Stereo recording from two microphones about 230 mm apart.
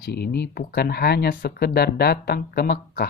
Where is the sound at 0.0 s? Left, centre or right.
Left.